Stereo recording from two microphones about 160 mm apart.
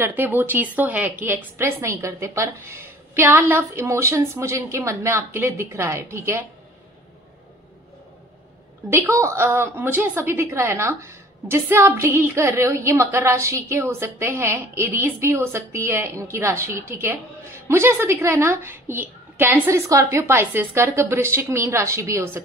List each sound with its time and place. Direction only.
0.0 s a woman's voice: 10° right (ahead or behind)
8.9 s a woman's voice: 15° right (ahead or behind)